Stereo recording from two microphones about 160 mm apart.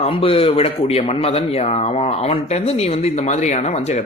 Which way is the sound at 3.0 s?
45° left (ahead or behind).